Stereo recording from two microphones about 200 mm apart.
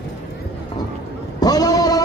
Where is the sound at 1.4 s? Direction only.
20° left (ahead or behind).